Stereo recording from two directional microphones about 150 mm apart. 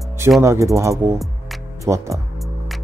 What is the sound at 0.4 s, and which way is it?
Speech, 20° right (ahead or behind).